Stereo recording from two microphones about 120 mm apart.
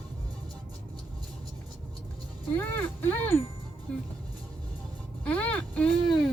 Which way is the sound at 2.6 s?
20° left (ahead or behind).